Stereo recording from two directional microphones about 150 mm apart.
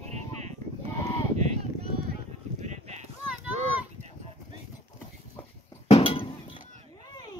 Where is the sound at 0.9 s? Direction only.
20° left (ahead or behind).